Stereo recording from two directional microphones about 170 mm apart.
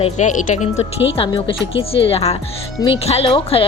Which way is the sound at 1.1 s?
30° left (ahead or behind).